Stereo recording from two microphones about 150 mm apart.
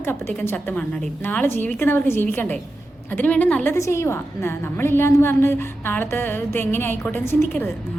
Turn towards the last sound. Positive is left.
turn(degrees=15)  # may be behind; listen again after turning